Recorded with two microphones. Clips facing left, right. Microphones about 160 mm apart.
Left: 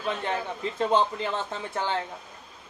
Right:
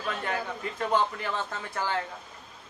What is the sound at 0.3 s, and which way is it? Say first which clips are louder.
A man's voice: left 2 dB; 20° left (ahead or behind).